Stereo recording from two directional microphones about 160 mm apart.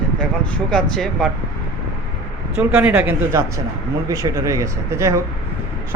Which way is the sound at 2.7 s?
10° right (ahead or behind).